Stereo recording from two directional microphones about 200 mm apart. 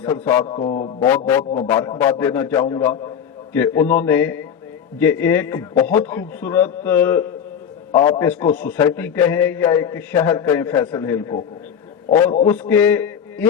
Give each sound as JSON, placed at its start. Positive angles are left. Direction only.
{"t": 0.0, "sound": "a man's voice", "side_deg": 10}
{"t": 0.4, "sound": "mantra", "side_deg": 25}
{"t": 1.0, "sound": "a man's voice", "side_deg": 10}
{"t": 12.5, "sound": "a man's voice", "side_deg": 10}